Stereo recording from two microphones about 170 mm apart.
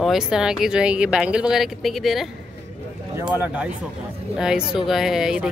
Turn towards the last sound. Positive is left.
turn(degrees=-5)  # may be behind; listen again after turning